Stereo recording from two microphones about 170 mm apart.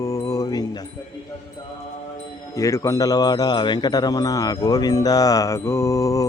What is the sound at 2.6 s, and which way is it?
Speech, 20° left (ahead or behind).